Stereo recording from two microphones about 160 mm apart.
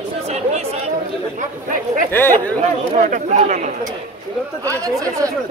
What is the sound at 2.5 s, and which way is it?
Speech, 45° right (ahead or behind).